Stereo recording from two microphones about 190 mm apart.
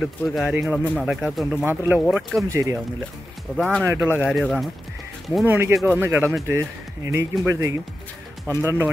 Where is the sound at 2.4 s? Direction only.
15° right (ahead or behind).